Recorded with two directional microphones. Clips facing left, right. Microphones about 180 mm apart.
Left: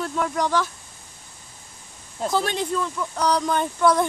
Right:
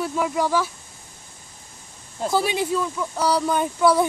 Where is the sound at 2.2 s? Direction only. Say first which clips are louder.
Right 2 dB; 5° right (ahead or behind).